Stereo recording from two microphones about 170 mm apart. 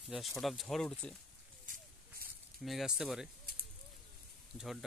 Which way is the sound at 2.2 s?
60° right (ahead or behind).